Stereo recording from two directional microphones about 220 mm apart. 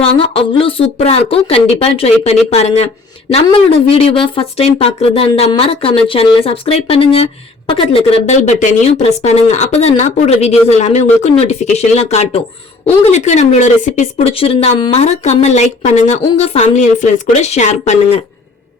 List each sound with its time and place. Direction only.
0.0 s speech: 25° left (ahead or behind)